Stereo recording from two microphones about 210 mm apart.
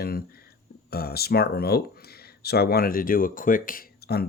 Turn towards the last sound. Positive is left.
turn(degrees=45)  # may be behind; listen again after turning